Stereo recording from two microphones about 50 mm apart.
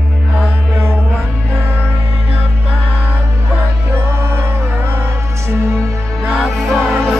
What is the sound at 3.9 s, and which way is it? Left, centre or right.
Music, right.